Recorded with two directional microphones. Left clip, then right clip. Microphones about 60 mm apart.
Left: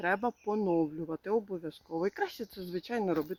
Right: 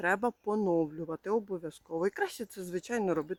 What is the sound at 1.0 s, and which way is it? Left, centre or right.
Speech, right.